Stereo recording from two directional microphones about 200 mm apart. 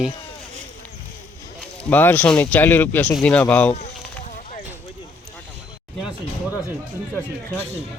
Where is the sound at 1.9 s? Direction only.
10° left (ahead or behind).